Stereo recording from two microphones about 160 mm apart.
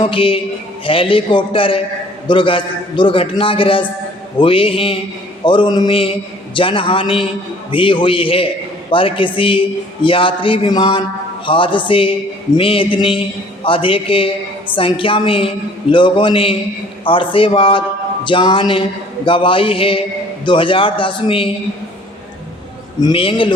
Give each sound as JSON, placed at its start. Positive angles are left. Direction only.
{"t": 0.0, "sound": "a man's voice", "side_deg": 35}
{"t": 23.0, "sound": "a man's voice", "side_deg": 30}